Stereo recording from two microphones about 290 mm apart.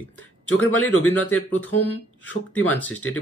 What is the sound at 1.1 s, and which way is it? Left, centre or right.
Speech, centre.